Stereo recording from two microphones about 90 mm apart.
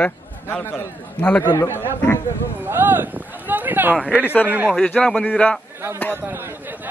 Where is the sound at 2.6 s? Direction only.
20° right (ahead or behind).